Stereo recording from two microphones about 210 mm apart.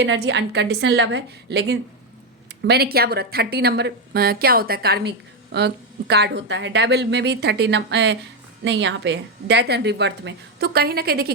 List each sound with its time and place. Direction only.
0.0 s a woman's voice: 55° right (ahead or behind)